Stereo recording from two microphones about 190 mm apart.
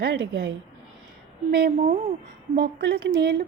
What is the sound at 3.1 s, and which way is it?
Speech, 65° right (ahead or behind).